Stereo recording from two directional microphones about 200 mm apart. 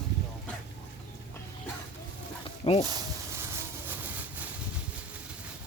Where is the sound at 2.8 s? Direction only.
20° right (ahead or behind).